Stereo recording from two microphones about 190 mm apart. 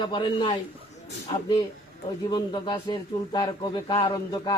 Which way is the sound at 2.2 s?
20° left (ahead or behind).